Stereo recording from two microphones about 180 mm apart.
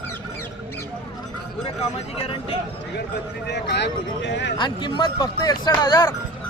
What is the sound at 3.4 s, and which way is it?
Speech, 70° left (ahead or behind).